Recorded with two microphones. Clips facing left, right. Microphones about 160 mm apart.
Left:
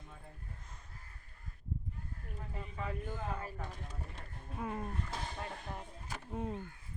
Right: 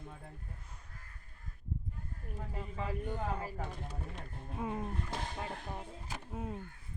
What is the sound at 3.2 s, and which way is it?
Speech, 35° right (ahead or behind).